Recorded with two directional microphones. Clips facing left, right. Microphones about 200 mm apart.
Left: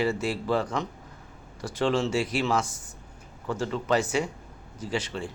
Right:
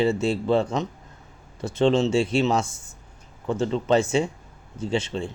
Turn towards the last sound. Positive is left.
turn(degrees=-25)  # may be behind; listen again after turning